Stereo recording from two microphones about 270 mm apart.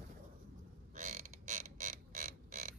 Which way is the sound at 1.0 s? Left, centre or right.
Right.